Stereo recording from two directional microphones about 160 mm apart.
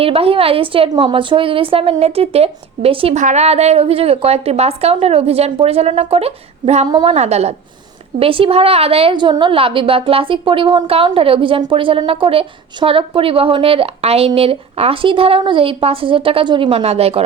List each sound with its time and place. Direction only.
0.0 s a woman's voice: 35° right (ahead or behind)
3.2 s a woman's voice: 45° right (ahead or behind)